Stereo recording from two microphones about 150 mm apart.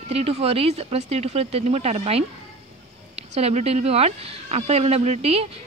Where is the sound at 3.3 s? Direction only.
45° right (ahead or behind).